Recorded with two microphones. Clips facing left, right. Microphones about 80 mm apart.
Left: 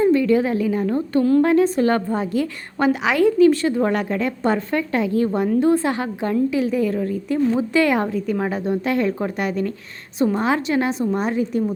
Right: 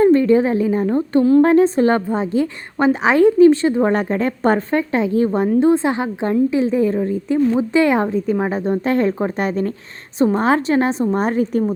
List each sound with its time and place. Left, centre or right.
0.0 s a woman's voice: right
4.7 s a woman's voice: right